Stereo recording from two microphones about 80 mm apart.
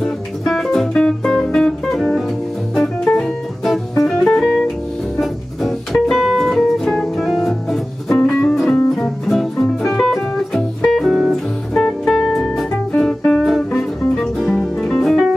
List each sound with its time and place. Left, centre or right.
0.0 s music: centre
6.1 s music: centre